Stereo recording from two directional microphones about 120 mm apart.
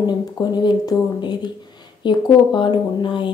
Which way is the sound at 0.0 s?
35° left (ahead or behind).